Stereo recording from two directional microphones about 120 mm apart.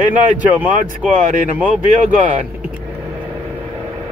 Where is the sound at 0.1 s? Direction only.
15° right (ahead or behind).